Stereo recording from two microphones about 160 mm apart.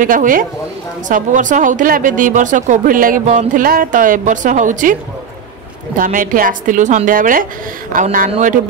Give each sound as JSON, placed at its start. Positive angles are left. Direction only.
{"t": 0.0, "sound": "speech", "side_deg": -60}
{"t": 5.9, "sound": "speech", "side_deg": -60}
{"t": 8.3, "sound": "a man's voice", "side_deg": -50}